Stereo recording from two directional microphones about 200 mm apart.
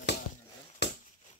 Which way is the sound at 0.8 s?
60° left (ahead or behind).